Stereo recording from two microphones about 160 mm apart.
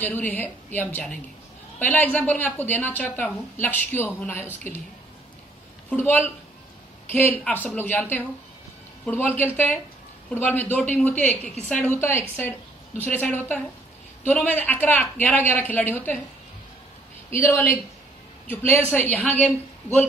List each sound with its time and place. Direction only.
0.0 s a woman's voice: 10° left (ahead or behind)
5.9 s a woman's voice: 10° left (ahead or behind)
17.3 s a woman's voice: 15° left (ahead or behind)